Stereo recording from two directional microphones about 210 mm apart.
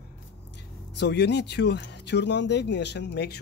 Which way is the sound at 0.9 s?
55° left (ahead or behind).